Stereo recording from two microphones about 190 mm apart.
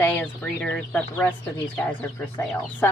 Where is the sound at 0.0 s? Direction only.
10° left (ahead or behind).